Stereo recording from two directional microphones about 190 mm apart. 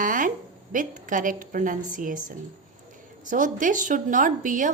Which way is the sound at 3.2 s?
45° right (ahead or behind).